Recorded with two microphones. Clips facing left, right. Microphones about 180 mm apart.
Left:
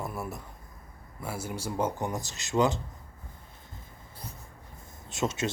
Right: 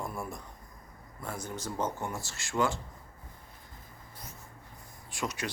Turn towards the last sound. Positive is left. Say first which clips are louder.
# left 6 dB
turn(degrees=25)  # may be behind; listen again after turning